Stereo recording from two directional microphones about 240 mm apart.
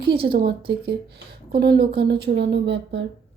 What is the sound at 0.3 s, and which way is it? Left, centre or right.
Speech, right.